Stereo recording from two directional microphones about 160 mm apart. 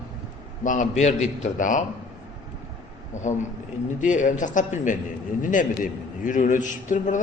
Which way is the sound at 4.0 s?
50° left (ahead or behind).